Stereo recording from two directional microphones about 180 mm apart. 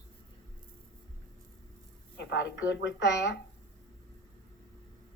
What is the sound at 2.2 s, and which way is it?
Speech, 75° left (ahead or behind).